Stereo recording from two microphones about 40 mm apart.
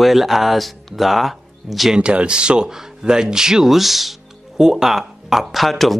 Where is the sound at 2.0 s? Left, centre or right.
Right.